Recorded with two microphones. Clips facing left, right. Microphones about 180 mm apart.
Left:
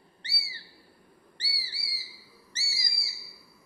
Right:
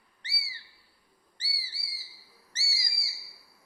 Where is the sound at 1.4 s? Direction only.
70° left (ahead or behind).